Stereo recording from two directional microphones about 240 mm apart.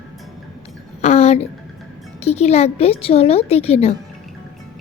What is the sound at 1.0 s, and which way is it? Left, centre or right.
A woman's voice, left.